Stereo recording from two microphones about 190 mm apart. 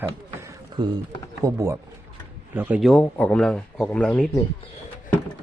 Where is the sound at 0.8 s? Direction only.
25° right (ahead or behind); by 4.3 s 5° left (ahead or behind).